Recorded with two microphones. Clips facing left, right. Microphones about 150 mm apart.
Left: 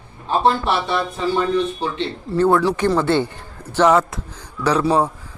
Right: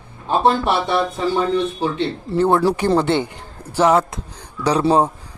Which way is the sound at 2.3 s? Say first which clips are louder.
Even; 25° right (ahead or behind).